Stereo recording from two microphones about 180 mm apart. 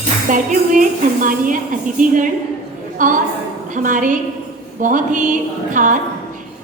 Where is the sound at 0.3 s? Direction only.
45° right (ahead or behind).